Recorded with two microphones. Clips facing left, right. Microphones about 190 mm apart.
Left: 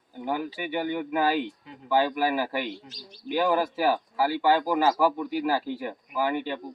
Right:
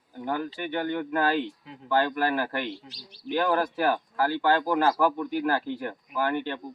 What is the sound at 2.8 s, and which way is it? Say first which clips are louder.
Speech: left 1 dB; 45° left (ahead or behind).